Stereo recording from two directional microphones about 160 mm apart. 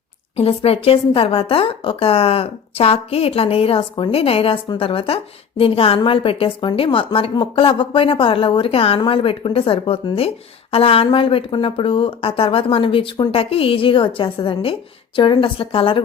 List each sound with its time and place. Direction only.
0.3 s a woman's voice: 40° left (ahead or behind)